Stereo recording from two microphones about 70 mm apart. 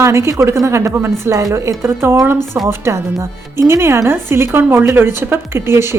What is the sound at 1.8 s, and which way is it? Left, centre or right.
A woman's voice, right.